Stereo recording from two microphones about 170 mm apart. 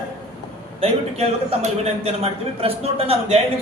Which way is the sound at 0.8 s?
40° right (ahead or behind).